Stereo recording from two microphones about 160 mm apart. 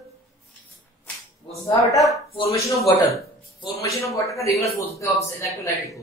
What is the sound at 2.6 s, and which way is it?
A woman's voice, 20° left (ahead or behind).